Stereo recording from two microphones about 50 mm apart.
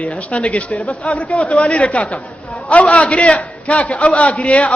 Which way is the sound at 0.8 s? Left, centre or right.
Centre.